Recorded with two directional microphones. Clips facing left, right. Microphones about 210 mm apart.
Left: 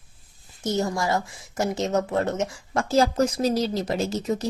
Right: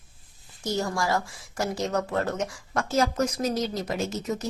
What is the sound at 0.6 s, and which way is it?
Speech, 20° left (ahead or behind).